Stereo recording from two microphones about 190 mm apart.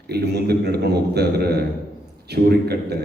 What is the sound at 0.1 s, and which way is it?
A man's voice, 60° right (ahead or behind).